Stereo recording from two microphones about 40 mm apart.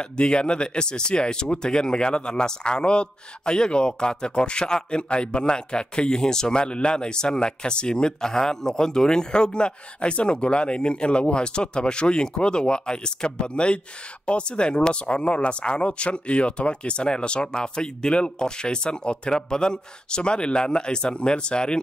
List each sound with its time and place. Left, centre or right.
0.0 s speech: left